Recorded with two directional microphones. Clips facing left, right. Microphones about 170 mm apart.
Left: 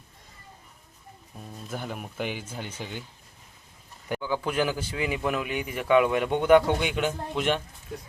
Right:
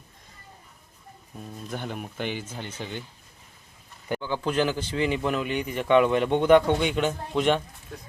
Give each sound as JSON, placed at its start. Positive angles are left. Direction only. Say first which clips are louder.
{"t": 1.7, "sound": "a man's voice", "louder": "right 1 dB", "side_deg": 5}
{"t": 4.1, "sound": "a man's voice", "louder": "right 1 dB", "side_deg": 10}